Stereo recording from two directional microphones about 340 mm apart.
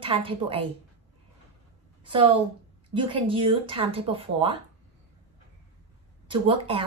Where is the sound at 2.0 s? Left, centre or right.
Centre.